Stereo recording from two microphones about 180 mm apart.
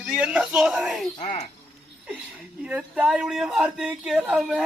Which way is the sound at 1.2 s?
35° left (ahead or behind).